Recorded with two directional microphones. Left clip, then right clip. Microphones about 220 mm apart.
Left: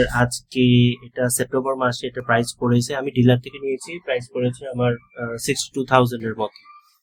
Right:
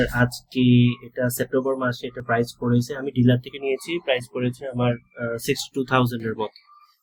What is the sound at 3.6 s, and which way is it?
Speech, 5° right (ahead or behind).